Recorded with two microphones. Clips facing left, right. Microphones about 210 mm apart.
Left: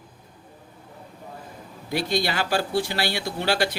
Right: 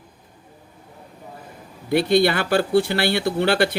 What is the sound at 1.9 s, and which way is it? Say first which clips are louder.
Speech: right 8 dB; 60° right (ahead or behind).